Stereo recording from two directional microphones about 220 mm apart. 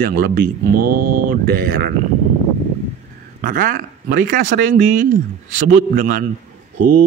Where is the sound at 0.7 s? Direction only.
90° right.